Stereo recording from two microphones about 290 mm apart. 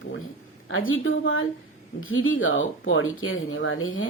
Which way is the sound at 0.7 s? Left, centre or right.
Left.